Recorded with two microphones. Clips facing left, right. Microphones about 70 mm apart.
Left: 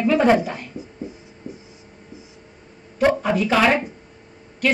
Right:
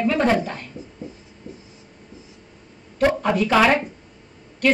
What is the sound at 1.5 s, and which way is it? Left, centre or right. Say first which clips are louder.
Writing: left 3 dB; centre.